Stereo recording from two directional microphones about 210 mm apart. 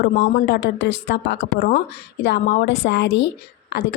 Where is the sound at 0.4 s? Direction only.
50° left (ahead or behind).